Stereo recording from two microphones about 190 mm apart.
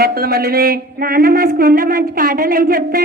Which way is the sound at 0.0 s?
55° right (ahead or behind).